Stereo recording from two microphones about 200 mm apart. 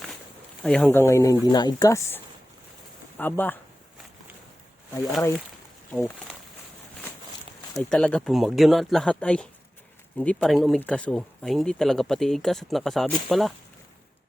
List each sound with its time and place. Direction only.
0.6 s speech: 5° left (ahead or behind)
7.7 s speech: 5° left (ahead or behind)